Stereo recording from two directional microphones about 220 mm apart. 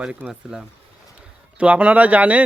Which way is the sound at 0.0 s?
5° right (ahead or behind).